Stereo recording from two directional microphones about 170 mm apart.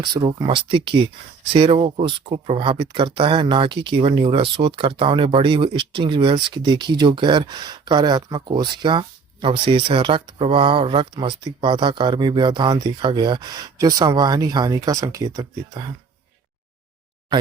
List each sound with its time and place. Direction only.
0.0 s speech: 25° right (ahead or behind)